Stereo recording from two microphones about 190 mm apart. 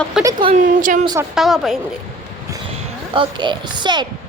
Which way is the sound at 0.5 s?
45° right (ahead or behind).